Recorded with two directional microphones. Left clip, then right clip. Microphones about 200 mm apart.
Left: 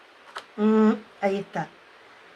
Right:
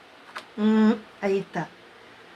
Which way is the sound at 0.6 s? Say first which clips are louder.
Left 2 dB; 30° left (ahead or behind).